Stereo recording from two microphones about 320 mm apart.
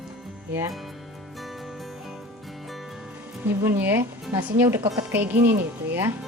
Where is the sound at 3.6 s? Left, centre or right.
Centre.